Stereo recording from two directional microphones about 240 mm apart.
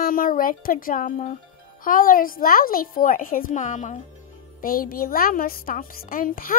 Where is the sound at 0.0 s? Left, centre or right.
Left.